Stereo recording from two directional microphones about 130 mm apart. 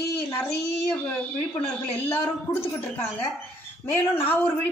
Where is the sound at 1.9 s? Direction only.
15° left (ahead or behind).